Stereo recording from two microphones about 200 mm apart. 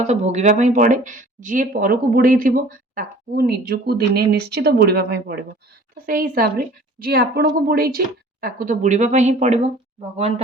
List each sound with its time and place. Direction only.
0.0 s a woman's voice: 35° right (ahead or behind)